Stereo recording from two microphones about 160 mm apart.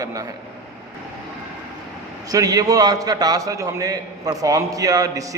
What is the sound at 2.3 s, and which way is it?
A man's voice, 20° right (ahead or behind).